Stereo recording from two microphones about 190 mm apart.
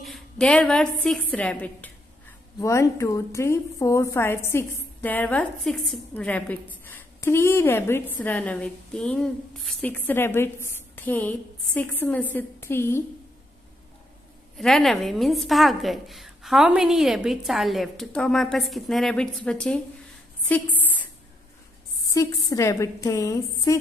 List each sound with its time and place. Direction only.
0.0 s a woman's voice: centre (ahead or behind)
14.6 s a woman's voice: centre (ahead or behind)
20.4 s a sound: 10° left (ahead or behind)
22.1 s a woman's voice: 20° left (ahead or behind)